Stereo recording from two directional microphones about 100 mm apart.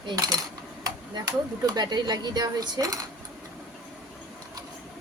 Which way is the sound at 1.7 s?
45° right (ahead or behind).